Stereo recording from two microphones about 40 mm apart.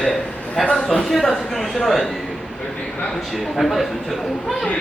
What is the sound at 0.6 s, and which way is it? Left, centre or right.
Speech, centre.